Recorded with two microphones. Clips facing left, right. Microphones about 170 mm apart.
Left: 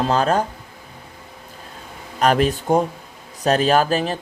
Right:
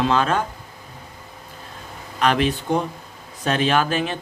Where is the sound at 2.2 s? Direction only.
45° left (ahead or behind).